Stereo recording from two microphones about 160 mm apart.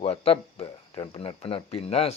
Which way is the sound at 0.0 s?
40° left (ahead or behind).